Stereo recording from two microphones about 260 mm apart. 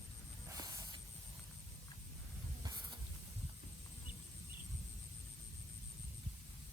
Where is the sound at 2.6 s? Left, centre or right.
Centre.